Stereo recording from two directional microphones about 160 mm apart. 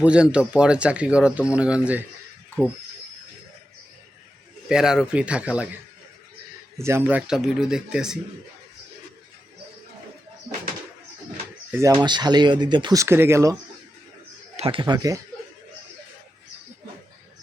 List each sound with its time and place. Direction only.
0.0 s speech: 5° right (ahead or behind)
4.7 s speech: 5° right (ahead or behind)
6.7 s speech: 15° right (ahead or behind)
11.7 s speech: 10° right (ahead or behind)
12.0 s speech: 25° right (ahead or behind)
14.5 s speech: 35° right (ahead or behind)